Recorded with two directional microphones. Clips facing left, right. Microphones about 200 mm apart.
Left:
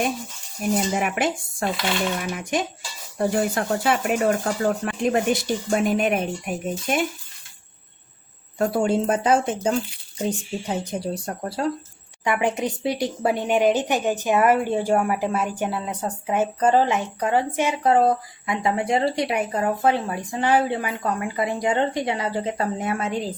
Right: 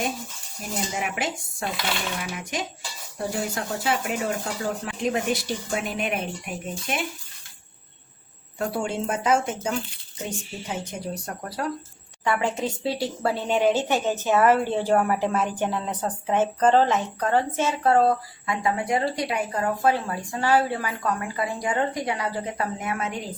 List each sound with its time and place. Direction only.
0.9 s speech: 55° left (ahead or behind)
8.5 s speech: 40° left (ahead or behind)
12.2 s speech: 15° left (ahead or behind)